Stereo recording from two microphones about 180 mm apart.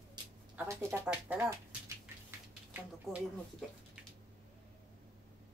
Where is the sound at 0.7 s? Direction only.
15° right (ahead or behind).